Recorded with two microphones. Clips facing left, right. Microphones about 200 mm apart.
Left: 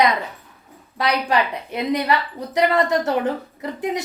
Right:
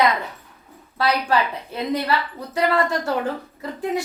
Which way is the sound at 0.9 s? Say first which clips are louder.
Even; 15° left (ahead or behind).